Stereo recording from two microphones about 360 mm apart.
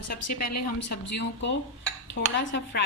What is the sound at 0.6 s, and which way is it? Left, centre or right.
A woman's voice, left.